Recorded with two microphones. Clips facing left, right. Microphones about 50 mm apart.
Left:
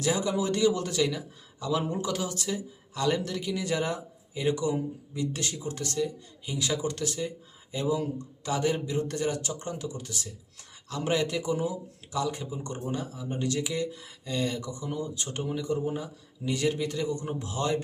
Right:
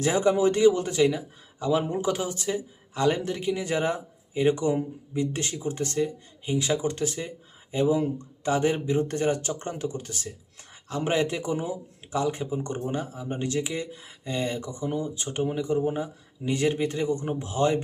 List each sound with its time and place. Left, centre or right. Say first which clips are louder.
0.0 s speech: right 6 dB; right